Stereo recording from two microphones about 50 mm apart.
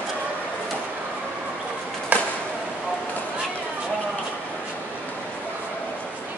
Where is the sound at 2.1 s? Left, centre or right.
Right.